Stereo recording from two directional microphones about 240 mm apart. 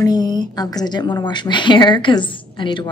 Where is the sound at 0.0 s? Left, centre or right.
Centre.